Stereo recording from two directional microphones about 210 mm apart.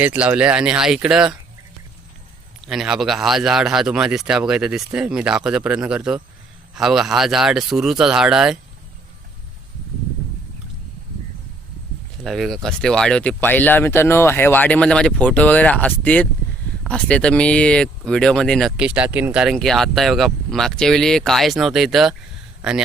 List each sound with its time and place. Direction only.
0.0 s speech: 10° right (ahead or behind)
2.6 s speech: centre (ahead or behind)
12.2 s speech: centre (ahead or behind)